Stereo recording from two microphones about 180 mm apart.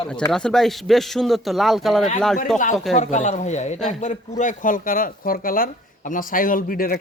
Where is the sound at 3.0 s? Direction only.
40° left (ahead or behind).